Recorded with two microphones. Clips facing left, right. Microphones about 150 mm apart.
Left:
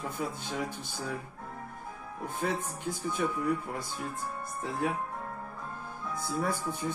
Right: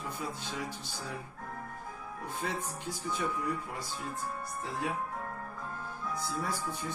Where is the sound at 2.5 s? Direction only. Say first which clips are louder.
Left 3 dB; 50° left (ahead or behind).